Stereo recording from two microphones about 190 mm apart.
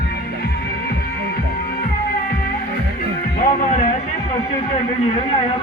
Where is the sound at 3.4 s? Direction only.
40° left (ahead or behind).